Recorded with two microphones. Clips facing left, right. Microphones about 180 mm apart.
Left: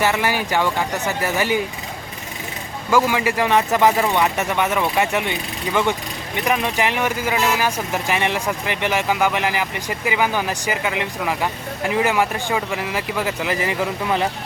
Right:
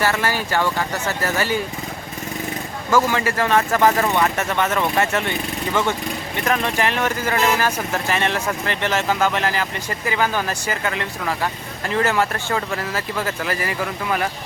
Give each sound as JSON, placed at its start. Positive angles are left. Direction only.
{"t": 0.0, "sound": "speech", "side_deg": 15}
{"t": 2.9, "sound": "speech", "side_deg": 15}
{"t": 6.4, "sound": "speech", "side_deg": 15}